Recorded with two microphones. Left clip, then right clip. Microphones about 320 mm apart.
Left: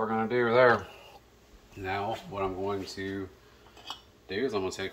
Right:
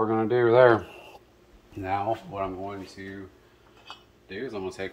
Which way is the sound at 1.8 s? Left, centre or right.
Centre.